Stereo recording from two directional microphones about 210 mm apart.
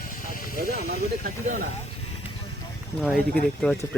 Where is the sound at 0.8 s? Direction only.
45° right (ahead or behind).